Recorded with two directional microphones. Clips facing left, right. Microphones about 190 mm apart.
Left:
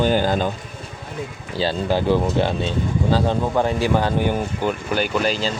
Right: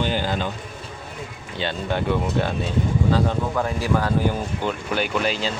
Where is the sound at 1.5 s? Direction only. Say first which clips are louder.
Left 5 dB; 35° left (ahead or behind).